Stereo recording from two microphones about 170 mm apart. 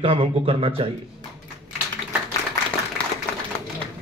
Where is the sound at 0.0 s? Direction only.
30° right (ahead or behind).